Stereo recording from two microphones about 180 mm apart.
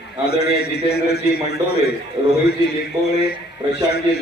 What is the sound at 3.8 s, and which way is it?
Speech, 65° left (ahead or behind).